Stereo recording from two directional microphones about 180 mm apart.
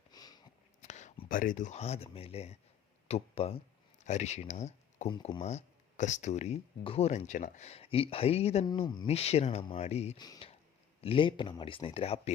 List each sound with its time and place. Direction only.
0.1 s a sound: 20° left (ahead or behind)
0.8 s speech: 40° left (ahead or behind)
8.6 s speech: 25° left (ahead or behind)
10.2 s speech: 20° left (ahead or behind)